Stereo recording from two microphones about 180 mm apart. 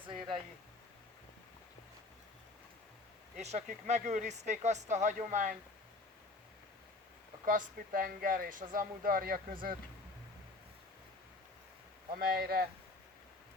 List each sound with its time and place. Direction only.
3.3 s speech: 40° right (ahead or behind)
7.4 s speech: 50° right (ahead or behind)
12.1 s speech: 55° right (ahead or behind)